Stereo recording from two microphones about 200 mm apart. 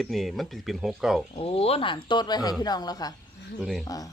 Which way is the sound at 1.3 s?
30° left (ahead or behind).